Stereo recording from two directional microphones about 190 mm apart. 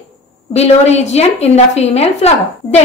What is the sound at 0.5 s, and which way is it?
A woman's voice, 35° left (ahead or behind).